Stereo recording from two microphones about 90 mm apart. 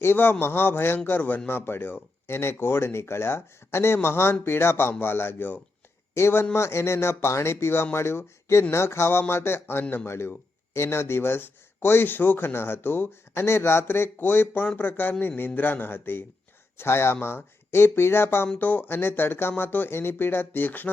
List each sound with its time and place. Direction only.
0.0 s speech: 25° left (ahead or behind)
10.1 s speech: 25° left (ahead or behind)